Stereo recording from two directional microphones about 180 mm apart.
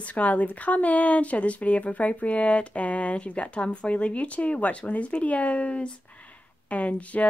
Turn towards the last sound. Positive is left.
turn(degrees=10)  # may be behind; listen again after turning